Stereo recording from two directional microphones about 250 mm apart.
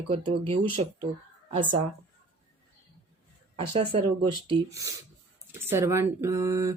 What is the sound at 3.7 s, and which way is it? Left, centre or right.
Speech, right.